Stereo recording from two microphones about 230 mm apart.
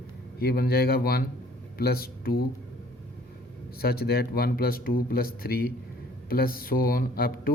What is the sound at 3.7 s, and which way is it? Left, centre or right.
Speech, left.